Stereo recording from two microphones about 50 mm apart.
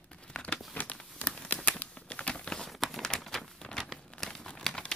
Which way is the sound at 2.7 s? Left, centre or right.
Centre.